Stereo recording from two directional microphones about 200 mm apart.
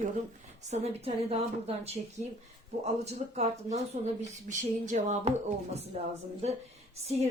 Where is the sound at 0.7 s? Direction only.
30° right (ahead or behind).